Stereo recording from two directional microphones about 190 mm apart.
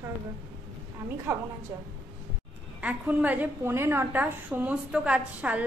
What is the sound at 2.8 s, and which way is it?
A woman's voice, 10° right (ahead or behind).